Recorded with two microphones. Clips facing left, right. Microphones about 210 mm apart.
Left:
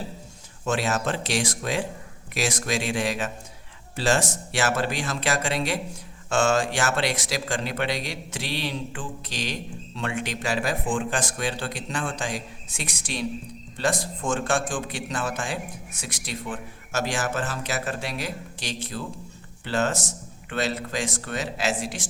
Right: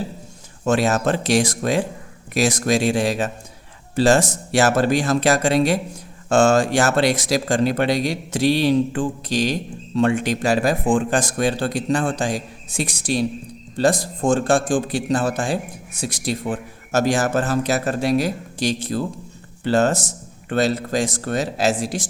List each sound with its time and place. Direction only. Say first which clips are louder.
0.6 s speech: right 7 dB; 40° right (ahead or behind)